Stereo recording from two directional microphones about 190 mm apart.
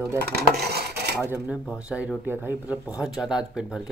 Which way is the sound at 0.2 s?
55° right (ahead or behind).